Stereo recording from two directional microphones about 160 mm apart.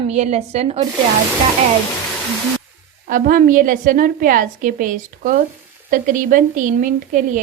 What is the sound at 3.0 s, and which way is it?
A woman's voice, 55° right (ahead or behind).